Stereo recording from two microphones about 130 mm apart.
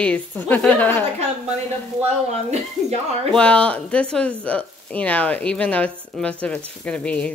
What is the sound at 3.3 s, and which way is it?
Speech, 10° left (ahead or behind).